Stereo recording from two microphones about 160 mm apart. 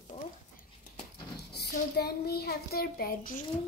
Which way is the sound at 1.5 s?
85° left.